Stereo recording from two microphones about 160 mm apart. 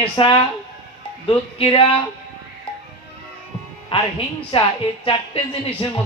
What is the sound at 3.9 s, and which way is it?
Speech, 35° left (ahead or behind).